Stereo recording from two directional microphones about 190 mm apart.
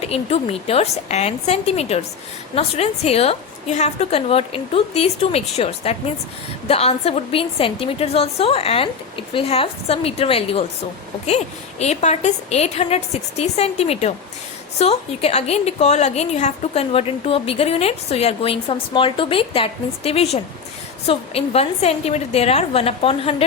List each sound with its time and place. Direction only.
0.0 s a woman's voice: 35° left (ahead or behind)